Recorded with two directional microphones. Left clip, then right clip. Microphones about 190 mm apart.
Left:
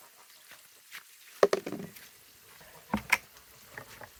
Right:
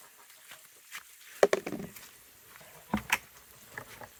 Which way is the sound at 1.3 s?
10° left (ahead or behind).